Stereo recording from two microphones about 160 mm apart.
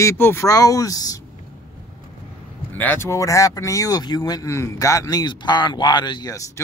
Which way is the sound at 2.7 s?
10° left (ahead or behind).